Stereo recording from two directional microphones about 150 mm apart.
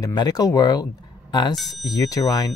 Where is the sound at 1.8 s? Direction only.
25° left (ahead or behind).